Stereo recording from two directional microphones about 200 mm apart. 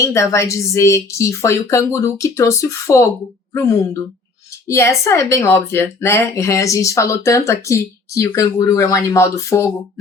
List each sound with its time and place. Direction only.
0.0 s speech: 15° left (ahead or behind)